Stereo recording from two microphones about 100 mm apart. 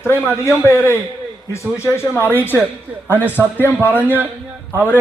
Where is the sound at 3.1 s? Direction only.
20° right (ahead or behind).